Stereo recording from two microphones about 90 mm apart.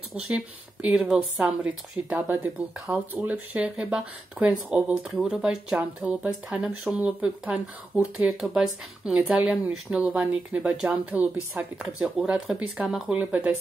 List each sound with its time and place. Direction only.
0.8 s speech: 10° right (ahead or behind)
1.6 s speech: 20° right (ahead or behind)
13.2 s speech: 20° right (ahead or behind)